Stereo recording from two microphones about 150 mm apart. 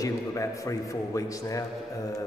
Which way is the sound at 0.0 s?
20° left (ahead or behind).